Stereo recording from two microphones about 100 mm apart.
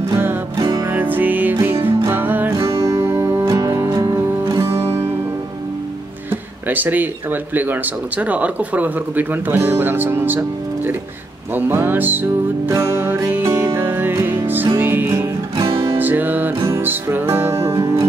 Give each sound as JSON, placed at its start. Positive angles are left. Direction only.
{"t": 0.6, "sound": "music", "side_deg": -30}
{"t": 0.9, "sound": "music", "side_deg": -20}
{"t": 2.8, "sound": "music", "side_deg": -30}
{"t": 6.7, "sound": "speech", "side_deg": -20}
{"t": 12.7, "sound": "music", "side_deg": -30}